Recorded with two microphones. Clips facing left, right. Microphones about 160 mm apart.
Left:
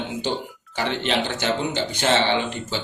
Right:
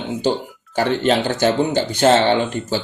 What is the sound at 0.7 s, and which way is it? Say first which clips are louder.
Speech: right 7 dB; 45° right (ahead or behind).